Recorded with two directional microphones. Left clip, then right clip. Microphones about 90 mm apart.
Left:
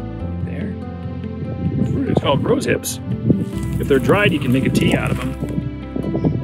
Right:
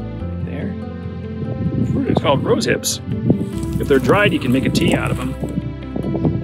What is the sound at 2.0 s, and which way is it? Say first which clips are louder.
Speech: right 1 dB; 15° right (ahead or behind).